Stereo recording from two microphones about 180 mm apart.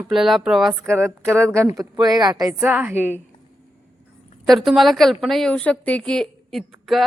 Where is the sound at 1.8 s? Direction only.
20° right (ahead or behind).